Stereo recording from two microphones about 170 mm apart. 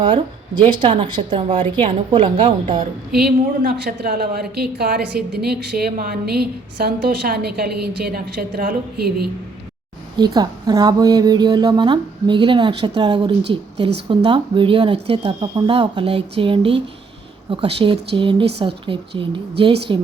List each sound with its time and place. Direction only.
0.6 s a woman's voice: 30° right (ahead or behind)
3.1 s a woman's voice: centre (ahead or behind)
3.6 s a woman's voice: 60° right (ahead or behind)
10.2 s a woman's voice: 25° right (ahead or behind)